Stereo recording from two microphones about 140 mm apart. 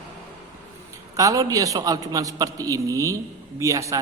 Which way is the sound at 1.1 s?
25° right (ahead or behind).